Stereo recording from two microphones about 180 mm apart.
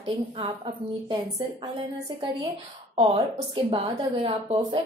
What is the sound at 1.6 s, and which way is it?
Speech, 20° right (ahead or behind).